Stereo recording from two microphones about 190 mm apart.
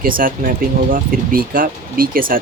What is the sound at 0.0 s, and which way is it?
Speech, 50° right (ahead or behind).